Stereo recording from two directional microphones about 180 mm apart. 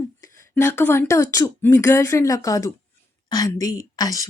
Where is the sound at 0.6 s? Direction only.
15° left (ahead or behind).